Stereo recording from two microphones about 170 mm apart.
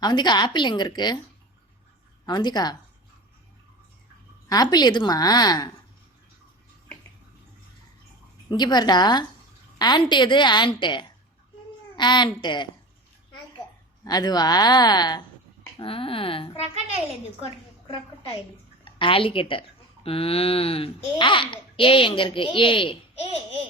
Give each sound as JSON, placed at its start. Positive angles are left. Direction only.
{"t": 0.0, "sound": "a woman's voice", "side_deg": 25}
{"t": 2.2, "sound": "a woman's voice", "side_deg": 25}
{"t": 4.4, "sound": "a woman's voice", "side_deg": 25}
{"t": 8.4, "sound": "a woman's voice", "side_deg": 25}
{"t": 14.0, "sound": "a woman's voice", "side_deg": 25}
{"t": 18.9, "sound": "a woman's voice", "side_deg": 30}